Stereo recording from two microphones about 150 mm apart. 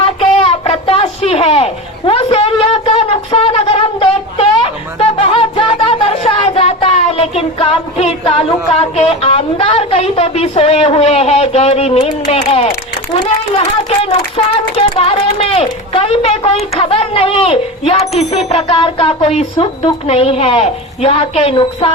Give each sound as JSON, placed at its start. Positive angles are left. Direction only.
{"t": 0.0, "sound": "a sound", "side_deg": 40}
{"t": 4.5, "sound": "speech", "side_deg": 35}
{"t": 13.1, "sound": "speech", "side_deg": 30}